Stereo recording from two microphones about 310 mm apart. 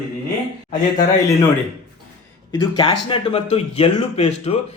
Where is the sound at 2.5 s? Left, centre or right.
Centre.